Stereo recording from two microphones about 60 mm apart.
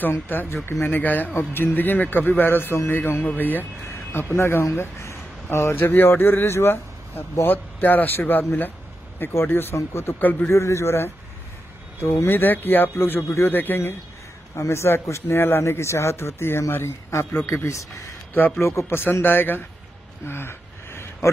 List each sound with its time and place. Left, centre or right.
0.3 s a man's voice: left
12.3 s speech: left
12.9 s a man's voice: left
13.5 s speech: left
14.5 s a man's voice: left
19.2 s speech: left
20.2 s a sound: left